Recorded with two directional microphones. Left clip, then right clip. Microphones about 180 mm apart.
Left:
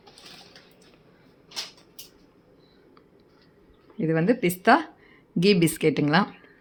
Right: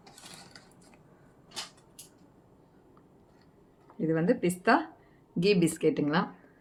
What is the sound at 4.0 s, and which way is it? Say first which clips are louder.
Speech: left 4 dB; 40° left (ahead or behind).